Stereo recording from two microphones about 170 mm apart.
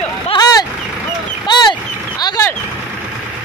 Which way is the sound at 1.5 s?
25° left (ahead or behind).